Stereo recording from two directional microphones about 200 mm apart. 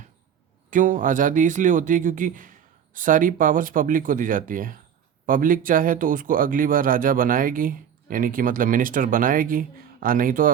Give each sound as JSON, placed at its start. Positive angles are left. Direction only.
{"t": 0.7, "sound": "speech", "side_deg": -40}